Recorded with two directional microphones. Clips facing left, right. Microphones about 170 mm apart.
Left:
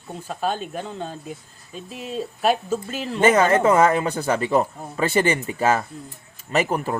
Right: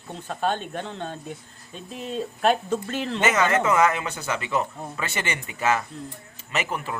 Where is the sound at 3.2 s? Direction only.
30° left (ahead or behind).